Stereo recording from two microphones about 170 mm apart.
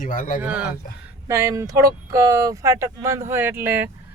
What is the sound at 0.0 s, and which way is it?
Speech, 55° left (ahead or behind).